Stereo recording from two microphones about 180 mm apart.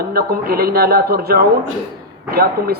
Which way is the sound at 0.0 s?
60° right (ahead or behind).